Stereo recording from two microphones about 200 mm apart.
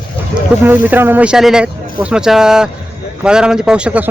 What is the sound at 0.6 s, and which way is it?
Speech, 10° right (ahead or behind).